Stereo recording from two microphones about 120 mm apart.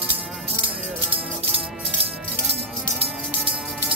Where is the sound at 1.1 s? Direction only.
50° right (ahead or behind).